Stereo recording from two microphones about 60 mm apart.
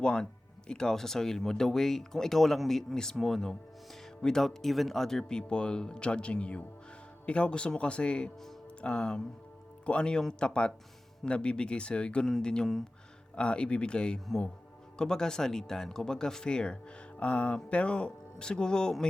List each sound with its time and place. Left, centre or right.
0.0 s speech: centre